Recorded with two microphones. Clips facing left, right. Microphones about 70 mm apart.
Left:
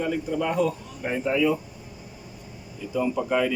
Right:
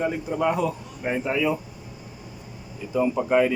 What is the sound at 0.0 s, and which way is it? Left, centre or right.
Speech, right.